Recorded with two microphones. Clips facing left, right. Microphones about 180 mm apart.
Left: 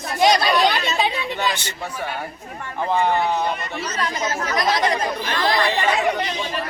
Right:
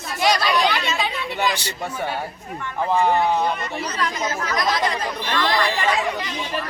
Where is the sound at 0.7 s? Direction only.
40° left (ahead or behind).